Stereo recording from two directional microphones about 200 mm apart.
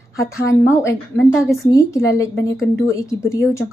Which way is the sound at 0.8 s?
15° left (ahead or behind).